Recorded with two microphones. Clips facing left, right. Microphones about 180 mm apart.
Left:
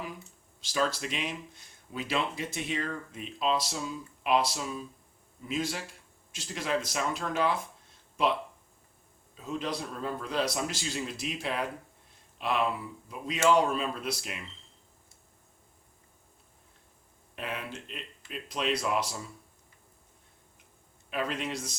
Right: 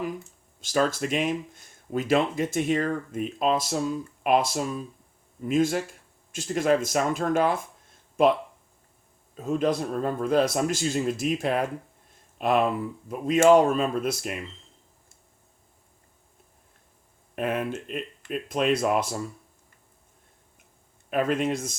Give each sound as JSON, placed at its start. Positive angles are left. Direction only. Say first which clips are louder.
{"t": 0.6, "sound": "speech", "louder": "right 6 dB", "side_deg": -50}
{"t": 17.3, "sound": "speech", "louder": "right 10 dB", "side_deg": -50}
{"t": 21.1, "sound": "speech", "louder": "right 8 dB", "side_deg": -50}